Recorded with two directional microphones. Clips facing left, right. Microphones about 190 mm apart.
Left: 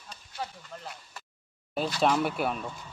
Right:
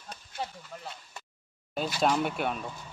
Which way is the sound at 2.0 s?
Centre (ahead or behind).